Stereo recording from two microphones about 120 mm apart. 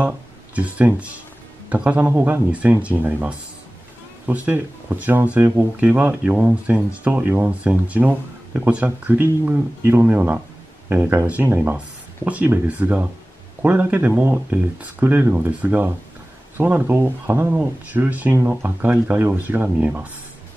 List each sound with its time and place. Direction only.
0.6 s speech: 10° right (ahead or behind)